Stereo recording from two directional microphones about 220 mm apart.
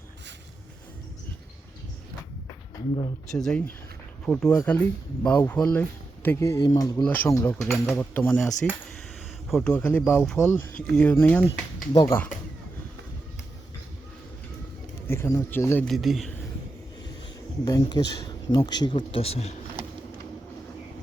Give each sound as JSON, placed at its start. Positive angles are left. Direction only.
{"t": 3.3, "sound": "a man's voice", "side_deg": 0}
{"t": 7.7, "sound": "a man's voice", "side_deg": 5}
{"t": 15.0, "sound": "a man's voice", "side_deg": 10}
{"t": 17.7, "sound": "a man's voice", "side_deg": 15}